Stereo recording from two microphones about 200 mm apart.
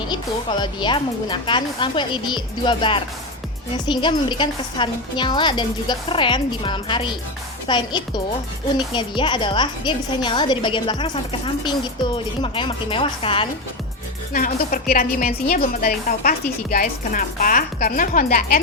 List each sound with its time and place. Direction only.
0.1 s a woman's voice: 20° left (ahead or behind)
14.3 s a woman's voice: 45° left (ahead or behind)